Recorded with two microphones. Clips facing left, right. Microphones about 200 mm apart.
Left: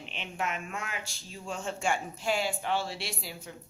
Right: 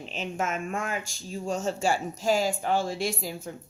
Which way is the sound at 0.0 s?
40° right (ahead or behind).